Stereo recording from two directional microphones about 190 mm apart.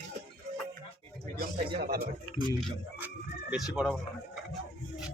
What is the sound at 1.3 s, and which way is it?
Speech, 50° right (ahead or behind).